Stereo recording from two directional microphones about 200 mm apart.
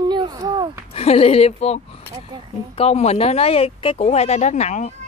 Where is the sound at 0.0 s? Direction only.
20° right (ahead or behind).